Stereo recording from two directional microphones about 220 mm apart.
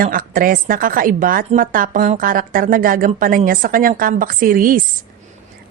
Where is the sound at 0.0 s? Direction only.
40° right (ahead or behind).